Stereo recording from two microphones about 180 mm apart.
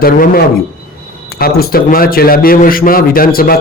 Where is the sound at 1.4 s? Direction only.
55° left (ahead or behind).